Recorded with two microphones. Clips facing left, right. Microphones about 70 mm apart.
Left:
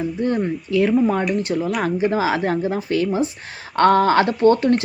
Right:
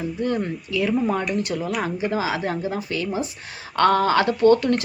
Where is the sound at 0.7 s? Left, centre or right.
Left.